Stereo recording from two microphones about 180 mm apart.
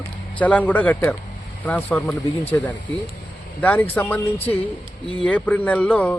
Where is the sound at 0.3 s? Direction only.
10° left (ahead or behind).